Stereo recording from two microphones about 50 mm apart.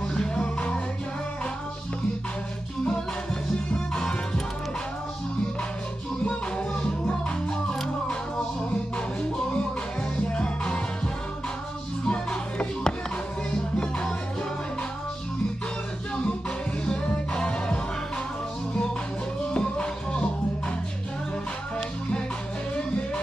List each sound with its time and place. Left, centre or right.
0.1 s music: centre
3.7 s music: centre
6.2 s music: left
8.9 s music: left
12.1 s music: left
16.8 s music: left
19.4 s music: left
22.8 s music: left